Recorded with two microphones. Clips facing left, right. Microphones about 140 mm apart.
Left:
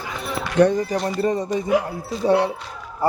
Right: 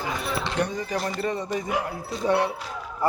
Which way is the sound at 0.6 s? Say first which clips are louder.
Left 13 dB; 90° left.